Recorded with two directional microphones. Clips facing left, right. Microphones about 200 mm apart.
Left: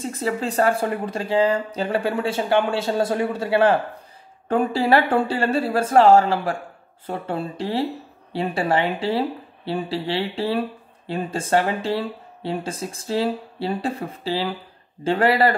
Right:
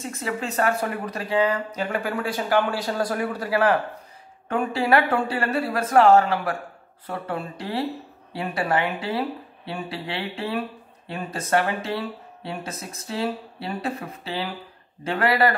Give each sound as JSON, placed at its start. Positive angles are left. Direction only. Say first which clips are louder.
{"t": 0.0, "sound": "speech", "louder": "left 4 dB", "side_deg": 30}